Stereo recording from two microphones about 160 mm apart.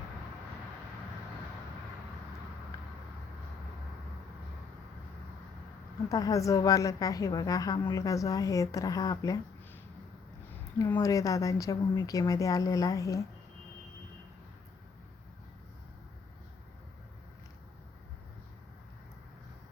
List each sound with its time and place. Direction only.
6.1 s a woman's voice: 20° left (ahead or behind)
10.9 s a woman's voice: 20° left (ahead or behind)